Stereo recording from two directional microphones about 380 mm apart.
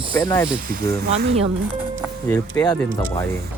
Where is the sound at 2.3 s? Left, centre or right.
Centre.